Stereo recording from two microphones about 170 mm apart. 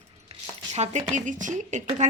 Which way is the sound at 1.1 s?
45° right (ahead or behind).